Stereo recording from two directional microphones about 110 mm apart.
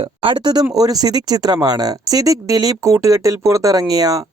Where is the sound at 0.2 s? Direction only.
50° right (ahead or behind).